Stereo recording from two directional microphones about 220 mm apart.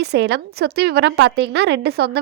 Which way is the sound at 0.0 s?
50° right (ahead or behind).